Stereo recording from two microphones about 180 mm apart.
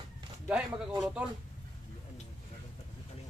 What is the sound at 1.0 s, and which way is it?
Speech, 5° right (ahead or behind).